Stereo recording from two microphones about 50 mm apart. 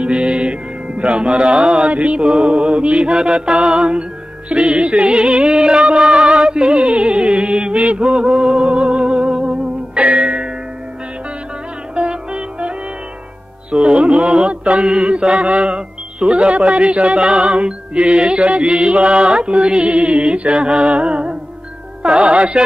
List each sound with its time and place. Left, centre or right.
0.0 s music: centre
1.9 s speech: right
3.1 s music: centre
7.8 s mantra: right
8.1 s music: centre
11.9 s music: right
14.5 s speech: centre